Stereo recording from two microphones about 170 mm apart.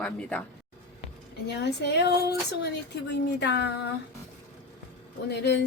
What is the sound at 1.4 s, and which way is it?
Speech, 80° left.